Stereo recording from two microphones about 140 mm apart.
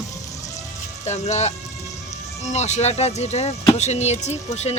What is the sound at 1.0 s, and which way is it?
Speech, 55° left (ahead or behind).